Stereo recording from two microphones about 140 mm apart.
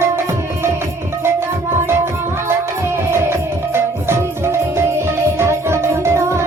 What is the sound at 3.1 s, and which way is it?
Music, 15° right (ahead or behind).